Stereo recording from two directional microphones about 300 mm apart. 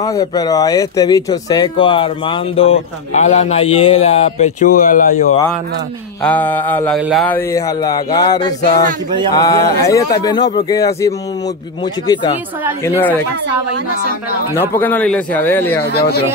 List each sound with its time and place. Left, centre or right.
0.0 s speech: centre
6.2 s a man's voice: centre
14.5 s a man's voice: centre
15.9 s speech: left